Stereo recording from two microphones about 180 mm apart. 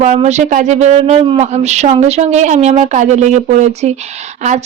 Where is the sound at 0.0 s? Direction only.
40° right (ahead or behind).